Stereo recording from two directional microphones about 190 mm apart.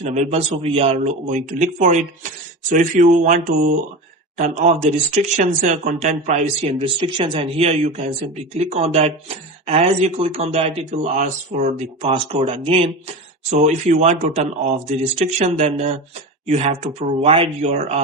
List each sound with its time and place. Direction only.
0.0 s speech: 35° right (ahead or behind)
12.1 s speech: 30° right (ahead or behind)